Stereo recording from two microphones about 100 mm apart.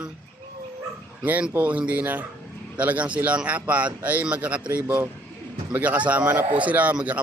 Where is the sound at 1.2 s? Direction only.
15° right (ahead or behind).